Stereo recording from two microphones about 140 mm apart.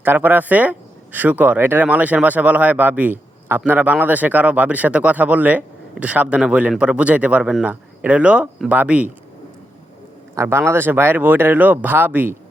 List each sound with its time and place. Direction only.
0.0 s speech: 15° right (ahead or behind)
10.3 s speech: 20° right (ahead or behind)